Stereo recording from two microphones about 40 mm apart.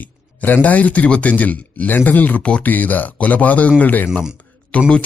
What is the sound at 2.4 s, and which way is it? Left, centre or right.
Speech, left.